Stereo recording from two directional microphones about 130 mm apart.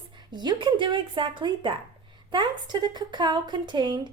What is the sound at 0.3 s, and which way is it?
A woman's voice, 35° right (ahead or behind).